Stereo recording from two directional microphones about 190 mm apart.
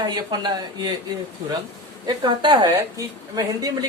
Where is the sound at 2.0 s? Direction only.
25° right (ahead or behind).